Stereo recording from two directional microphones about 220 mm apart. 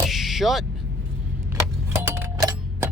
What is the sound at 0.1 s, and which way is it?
Vehicle, centre (ahead or behind).